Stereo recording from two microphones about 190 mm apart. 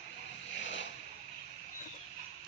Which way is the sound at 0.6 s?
70° left (ahead or behind).